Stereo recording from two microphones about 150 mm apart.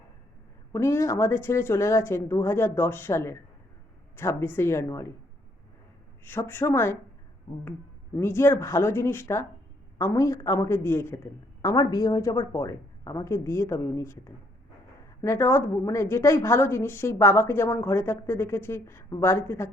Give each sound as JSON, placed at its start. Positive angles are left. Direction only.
{"t": 0.7, "sound": "a woman's voice", "side_deg": 20}
{"t": 6.2, "sound": "a woman's voice", "side_deg": 15}
{"t": 8.1, "sound": "a woman's voice", "side_deg": 15}